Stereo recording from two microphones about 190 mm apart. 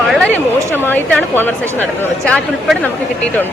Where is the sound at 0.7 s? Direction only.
10° left (ahead or behind).